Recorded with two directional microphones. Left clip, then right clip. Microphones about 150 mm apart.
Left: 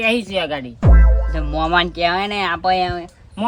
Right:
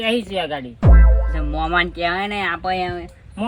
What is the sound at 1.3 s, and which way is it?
Speech, 35° left (ahead or behind).